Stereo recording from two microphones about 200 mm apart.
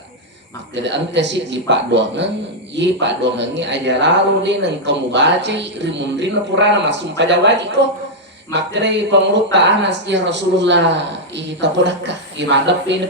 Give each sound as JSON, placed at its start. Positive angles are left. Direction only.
{"t": 0.8, "sound": "speech", "side_deg": -60}